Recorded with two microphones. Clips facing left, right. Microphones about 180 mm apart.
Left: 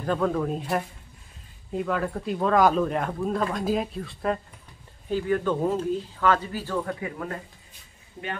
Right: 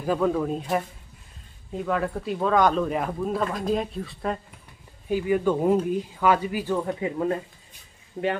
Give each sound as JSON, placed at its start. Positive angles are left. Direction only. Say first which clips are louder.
{"t": 0.0, "sound": "speech", "louder": "right 2 dB", "side_deg": -5}
{"t": 5.1, "sound": "speech", "louder": "right 2 dB", "side_deg": -10}